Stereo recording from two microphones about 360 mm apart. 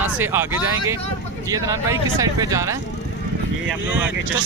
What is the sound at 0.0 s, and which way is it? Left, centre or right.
Speech, centre.